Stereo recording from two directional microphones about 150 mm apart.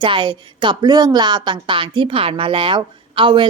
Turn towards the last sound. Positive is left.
turn(degrees=-30)  # may be behind; listen again after turning